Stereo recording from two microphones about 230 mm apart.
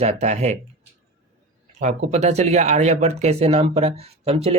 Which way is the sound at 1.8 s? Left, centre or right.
Right.